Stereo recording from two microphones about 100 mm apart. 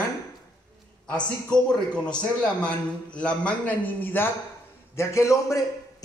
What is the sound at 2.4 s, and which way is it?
A man's voice, 10° left (ahead or behind).